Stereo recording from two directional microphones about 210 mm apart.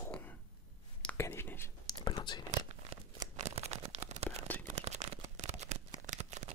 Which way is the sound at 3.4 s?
30° right (ahead or behind).